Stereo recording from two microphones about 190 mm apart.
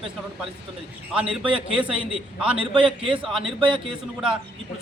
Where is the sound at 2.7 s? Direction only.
25° right (ahead or behind).